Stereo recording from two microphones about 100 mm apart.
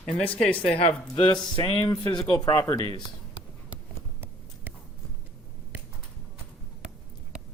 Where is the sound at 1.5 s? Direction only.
60° left (ahead or behind).